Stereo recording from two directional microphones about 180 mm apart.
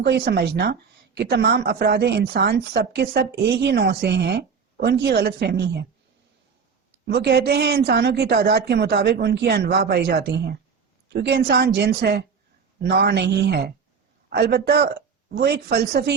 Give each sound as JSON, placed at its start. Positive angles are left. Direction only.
{"t": 0.0, "sound": "a woman's voice", "side_deg": -65}
{"t": 7.1, "sound": "a woman's voice", "side_deg": -65}